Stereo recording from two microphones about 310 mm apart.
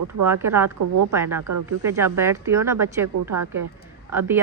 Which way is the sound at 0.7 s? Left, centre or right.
Right.